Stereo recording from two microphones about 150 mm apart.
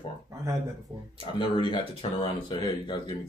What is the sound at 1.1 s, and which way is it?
Speech, 35° left (ahead or behind).